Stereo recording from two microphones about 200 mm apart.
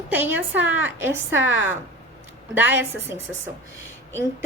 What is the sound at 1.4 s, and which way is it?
Speech, 70° right (ahead or behind).